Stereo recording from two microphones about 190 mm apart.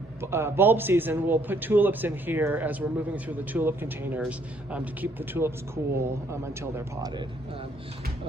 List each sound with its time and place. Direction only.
0.2 s a man's voice: 15° right (ahead or behind)